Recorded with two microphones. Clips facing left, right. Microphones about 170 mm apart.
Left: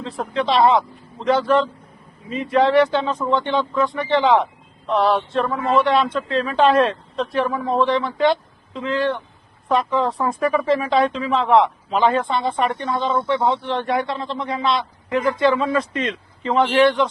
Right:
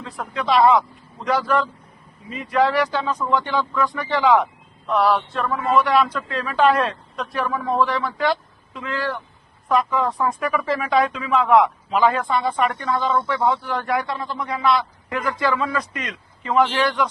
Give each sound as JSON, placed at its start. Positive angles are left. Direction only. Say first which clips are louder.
{"t": 0.0, "sound": "speech", "louder": "left 5 dB", "side_deg": 25}